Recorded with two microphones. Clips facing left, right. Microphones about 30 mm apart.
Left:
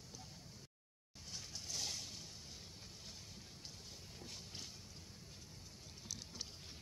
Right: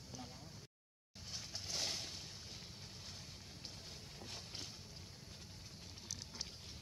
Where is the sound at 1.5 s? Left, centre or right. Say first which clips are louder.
Right 3 dB; right.